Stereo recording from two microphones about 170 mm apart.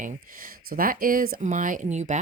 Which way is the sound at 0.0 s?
55° right (ahead or behind).